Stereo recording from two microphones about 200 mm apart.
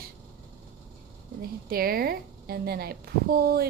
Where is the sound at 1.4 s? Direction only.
50° right (ahead or behind).